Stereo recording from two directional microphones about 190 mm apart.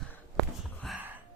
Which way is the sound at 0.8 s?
Centre (ahead or behind).